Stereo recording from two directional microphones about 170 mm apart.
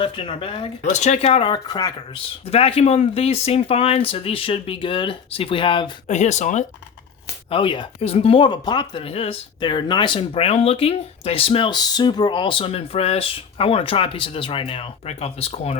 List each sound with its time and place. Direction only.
0.0 s speech: 30° left (ahead or behind)
6.1 s speech: 45° left (ahead or behind)
7.5 s speech: 30° left (ahead or behind)